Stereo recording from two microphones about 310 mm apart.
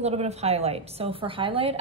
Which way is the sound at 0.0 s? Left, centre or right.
Right.